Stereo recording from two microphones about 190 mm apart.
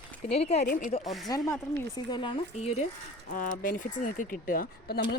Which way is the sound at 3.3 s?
45° left (ahead or behind).